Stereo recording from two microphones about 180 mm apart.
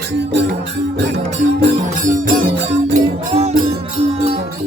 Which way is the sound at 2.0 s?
45° right (ahead or behind).